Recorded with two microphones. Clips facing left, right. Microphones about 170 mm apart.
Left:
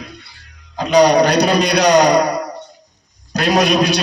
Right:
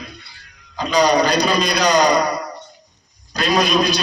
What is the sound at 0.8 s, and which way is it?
A man's voice, 65° left (ahead or behind).